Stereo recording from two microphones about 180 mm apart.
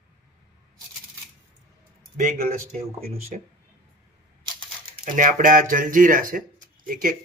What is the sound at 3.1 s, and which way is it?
Speech, 35° right (ahead or behind).